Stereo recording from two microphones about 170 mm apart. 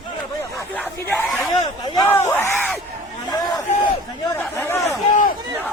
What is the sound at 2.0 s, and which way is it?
Yell, 15° left (ahead or behind).